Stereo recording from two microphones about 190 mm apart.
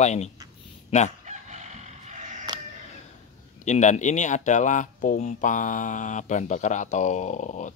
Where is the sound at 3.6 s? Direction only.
40° left (ahead or behind).